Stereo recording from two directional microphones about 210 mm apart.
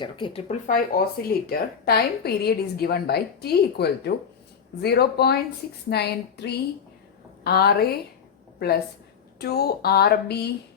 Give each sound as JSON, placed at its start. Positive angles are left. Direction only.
{"t": 0.0, "sound": "speech", "side_deg": 25}
{"t": 0.4, "sound": "a woman's voice", "side_deg": 40}